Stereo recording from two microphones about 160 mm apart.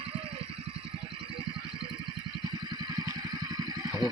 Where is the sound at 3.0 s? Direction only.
25° right (ahead or behind).